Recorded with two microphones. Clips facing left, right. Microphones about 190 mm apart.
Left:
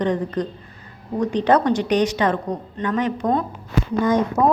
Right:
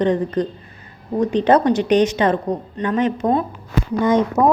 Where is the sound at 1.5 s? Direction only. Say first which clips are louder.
Right 2 dB; 20° right (ahead or behind).